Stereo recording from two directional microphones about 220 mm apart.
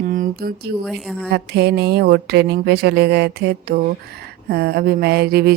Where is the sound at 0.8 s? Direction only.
Centre (ahead or behind).